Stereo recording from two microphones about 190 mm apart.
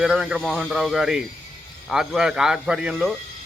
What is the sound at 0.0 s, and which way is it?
Speech, 5° right (ahead or behind).